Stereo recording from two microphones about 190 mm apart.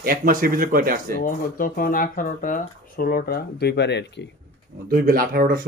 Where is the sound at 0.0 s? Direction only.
45° right (ahead or behind).